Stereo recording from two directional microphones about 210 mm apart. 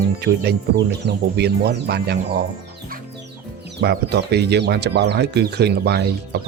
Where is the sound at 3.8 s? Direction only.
50° right (ahead or behind).